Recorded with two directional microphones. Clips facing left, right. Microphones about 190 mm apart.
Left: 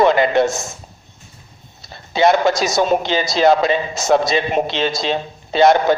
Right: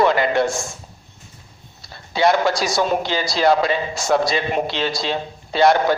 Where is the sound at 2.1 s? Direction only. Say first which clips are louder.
Left 3 dB; 20° left (ahead or behind).